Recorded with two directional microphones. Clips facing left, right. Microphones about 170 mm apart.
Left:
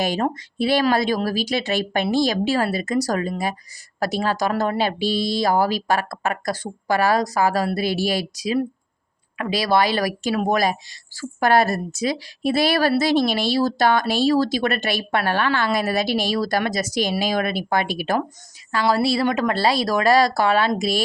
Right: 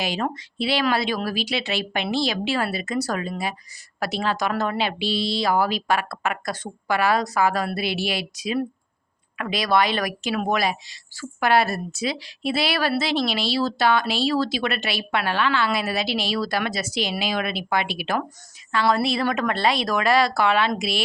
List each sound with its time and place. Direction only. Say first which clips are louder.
0.0 s a woman's voice: left 4 dB; 45° left (ahead or behind)
18.7 s a woman's voice: left 2 dB; 30° left (ahead or behind)